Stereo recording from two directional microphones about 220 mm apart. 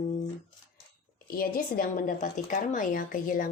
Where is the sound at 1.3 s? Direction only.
40° left (ahead or behind).